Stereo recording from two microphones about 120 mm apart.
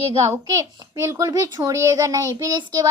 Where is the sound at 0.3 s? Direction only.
25° right (ahead or behind).